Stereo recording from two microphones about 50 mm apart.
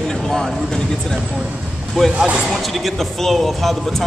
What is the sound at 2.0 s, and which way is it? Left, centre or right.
Speech, centre.